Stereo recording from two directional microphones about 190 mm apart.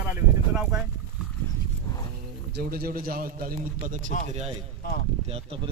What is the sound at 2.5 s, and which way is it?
A man's voice, 55° right (ahead or behind).